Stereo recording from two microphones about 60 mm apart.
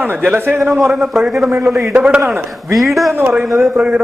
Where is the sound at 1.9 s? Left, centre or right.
Centre.